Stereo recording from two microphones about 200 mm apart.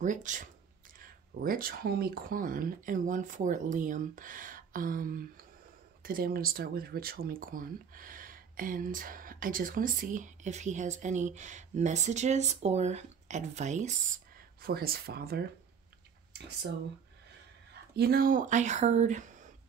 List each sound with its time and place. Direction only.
0.0 s speech: 40° right (ahead or behind)
17.9 s speech: 50° right (ahead or behind)